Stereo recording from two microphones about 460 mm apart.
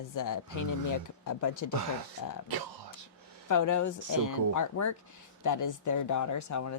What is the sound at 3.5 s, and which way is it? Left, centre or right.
Speech, left.